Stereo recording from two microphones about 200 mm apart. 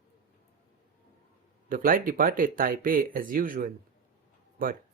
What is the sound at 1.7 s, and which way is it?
Speech, 45° right (ahead or behind).